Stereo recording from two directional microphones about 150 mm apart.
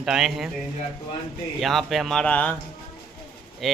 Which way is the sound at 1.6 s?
Centre (ahead or behind).